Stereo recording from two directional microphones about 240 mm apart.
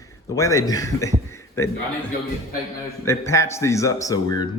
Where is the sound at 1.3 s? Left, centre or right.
Centre.